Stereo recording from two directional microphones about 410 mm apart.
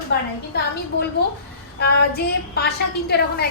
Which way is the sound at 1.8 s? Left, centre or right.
Left.